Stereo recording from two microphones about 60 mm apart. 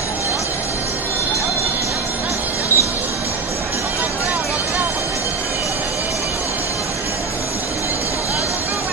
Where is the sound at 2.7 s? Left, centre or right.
Left.